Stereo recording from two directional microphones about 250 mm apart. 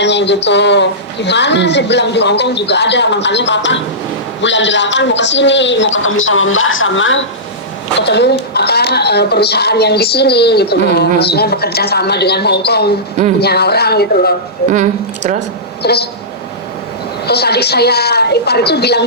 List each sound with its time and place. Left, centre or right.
0.0 s a woman's voice: left
14.7 s a woman's voice: right
15.8 s a woman's voice: left
17.2 s a woman's voice: left